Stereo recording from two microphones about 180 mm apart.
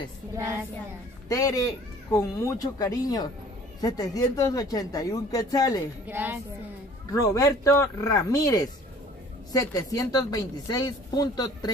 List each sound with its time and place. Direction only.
1.3 s a woman's voice: 20° left (ahead or behind)
6.0 s a woman's voice: 10° right (ahead or behind)
7.1 s a woman's voice: 20° left (ahead or behind)